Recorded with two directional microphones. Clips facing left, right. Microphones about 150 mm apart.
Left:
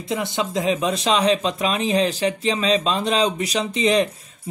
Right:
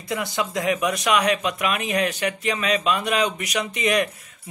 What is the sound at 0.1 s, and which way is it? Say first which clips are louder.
Speech: left 2 dB; 25° left (ahead or behind).